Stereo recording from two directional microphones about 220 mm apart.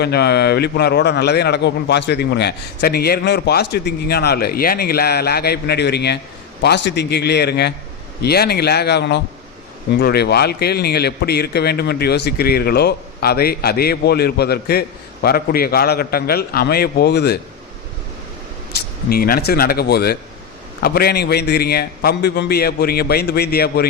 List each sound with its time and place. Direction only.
0.0 s a man's voice: 45° left (ahead or behind)
19.0 s a man's voice: 45° left (ahead or behind)